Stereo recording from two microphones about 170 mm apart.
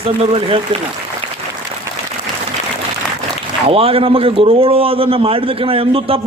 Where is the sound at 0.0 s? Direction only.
35° right (ahead or behind).